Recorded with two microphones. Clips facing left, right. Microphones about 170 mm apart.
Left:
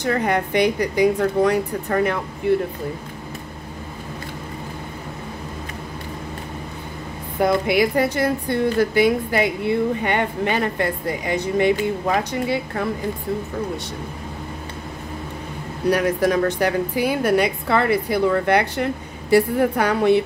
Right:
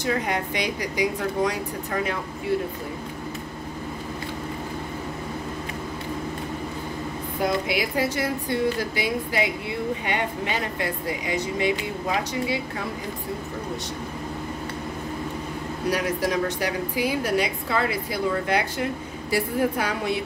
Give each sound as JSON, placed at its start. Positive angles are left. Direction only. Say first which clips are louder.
{"t": 0.0, "sound": "a woman's voice", "louder": "left 5 dB", "side_deg": 55}
{"t": 7.4, "sound": "a woman's voice", "louder": "left 7 dB", "side_deg": 55}
{"t": 15.9, "sound": "a woman's voice", "louder": "left 6 dB", "side_deg": 55}